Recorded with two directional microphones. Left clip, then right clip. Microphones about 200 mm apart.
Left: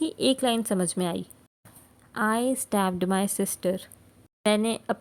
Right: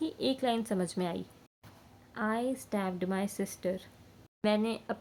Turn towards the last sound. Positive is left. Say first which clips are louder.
# left 6 dB
turn(degrees=35)  # may be behind; listen again after turning